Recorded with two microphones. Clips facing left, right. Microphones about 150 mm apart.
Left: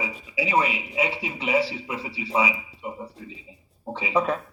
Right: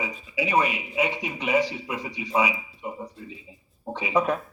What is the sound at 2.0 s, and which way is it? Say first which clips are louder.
Speech: even; 30° left (ahead or behind).